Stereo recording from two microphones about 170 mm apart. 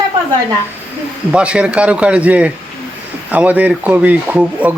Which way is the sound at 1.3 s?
5° right (ahead or behind).